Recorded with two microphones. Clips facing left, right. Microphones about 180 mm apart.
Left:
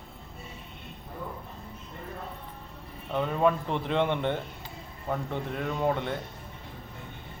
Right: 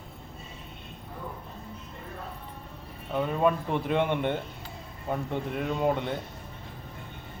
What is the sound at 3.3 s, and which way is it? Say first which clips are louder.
Speech: even; 10° right (ahead or behind).